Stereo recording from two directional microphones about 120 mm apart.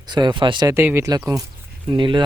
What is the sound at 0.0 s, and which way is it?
Speech, 40° right (ahead or behind).